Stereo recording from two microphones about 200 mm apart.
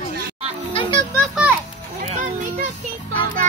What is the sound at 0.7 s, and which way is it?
Speech, 25° left (ahead or behind).